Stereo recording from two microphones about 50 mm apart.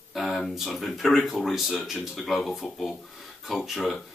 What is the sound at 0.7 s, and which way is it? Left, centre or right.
Speech, centre.